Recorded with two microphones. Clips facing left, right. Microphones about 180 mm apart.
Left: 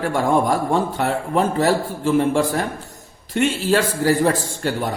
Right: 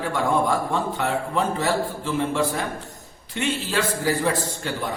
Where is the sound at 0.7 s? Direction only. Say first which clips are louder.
Left 4 dB; 45° left (ahead or behind).